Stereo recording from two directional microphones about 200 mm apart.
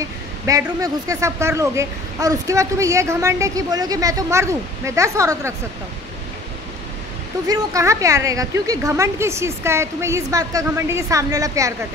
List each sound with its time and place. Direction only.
0.5 s speech: 15° right (ahead or behind)
7.4 s speech: 15° right (ahead or behind)